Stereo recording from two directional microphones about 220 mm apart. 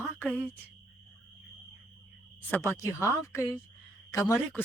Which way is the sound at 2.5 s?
10° left (ahead or behind).